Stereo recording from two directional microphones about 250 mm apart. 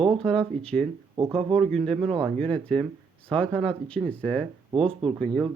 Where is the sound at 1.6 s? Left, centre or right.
Centre.